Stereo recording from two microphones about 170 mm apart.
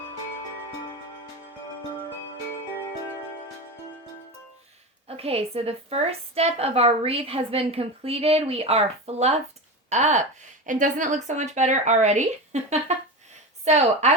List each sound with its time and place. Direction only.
5.0 s a woman's voice: 35° right (ahead or behind)